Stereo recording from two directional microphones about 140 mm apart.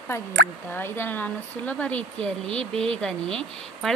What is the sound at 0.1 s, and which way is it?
Speech, 20° left (ahead or behind).